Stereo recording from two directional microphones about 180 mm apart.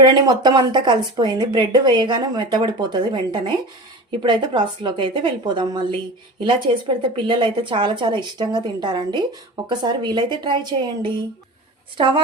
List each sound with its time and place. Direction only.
0.0 s speech: 25° right (ahead or behind)